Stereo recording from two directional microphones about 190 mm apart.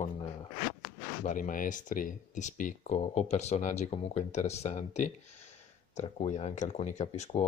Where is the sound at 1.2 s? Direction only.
45° left (ahead or behind).